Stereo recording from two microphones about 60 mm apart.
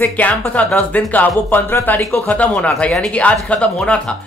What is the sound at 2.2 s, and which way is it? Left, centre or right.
Speech, left.